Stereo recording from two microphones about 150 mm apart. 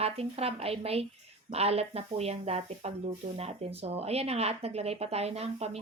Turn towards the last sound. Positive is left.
turn(degrees=-45)  # may be behind; listen again after turning